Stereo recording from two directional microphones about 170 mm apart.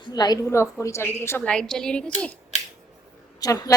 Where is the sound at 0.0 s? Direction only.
25° left (ahead or behind); by 2.3 s 5° left (ahead or behind).